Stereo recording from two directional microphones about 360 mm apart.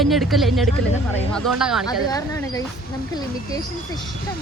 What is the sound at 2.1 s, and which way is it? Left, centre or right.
Speech, centre.